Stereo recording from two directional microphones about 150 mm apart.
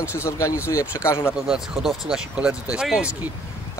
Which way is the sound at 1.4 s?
5° right (ahead or behind).